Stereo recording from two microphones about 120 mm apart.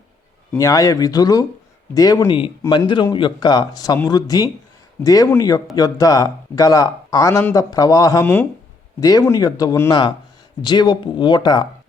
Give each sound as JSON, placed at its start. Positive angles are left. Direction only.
{"t": 0.5, "sound": "speech", "side_deg": 30}
{"t": 2.3, "sound": "a man's voice", "side_deg": 40}
{"t": 8.2, "sound": "speech", "side_deg": 15}
{"t": 9.0, "sound": "speech", "side_deg": 30}